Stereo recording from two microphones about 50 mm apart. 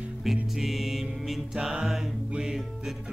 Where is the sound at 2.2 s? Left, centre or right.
Centre.